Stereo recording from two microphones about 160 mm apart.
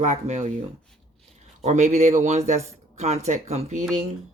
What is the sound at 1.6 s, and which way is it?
Speech, 45° right (ahead or behind).